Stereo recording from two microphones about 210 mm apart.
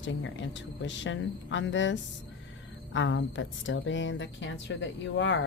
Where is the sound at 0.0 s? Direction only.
60° left (ahead or behind).